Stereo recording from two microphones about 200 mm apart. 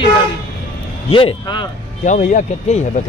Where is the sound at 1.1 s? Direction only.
25° left (ahead or behind).